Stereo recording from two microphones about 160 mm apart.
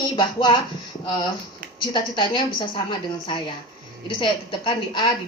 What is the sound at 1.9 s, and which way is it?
A woman's voice, 30° left (ahead or behind).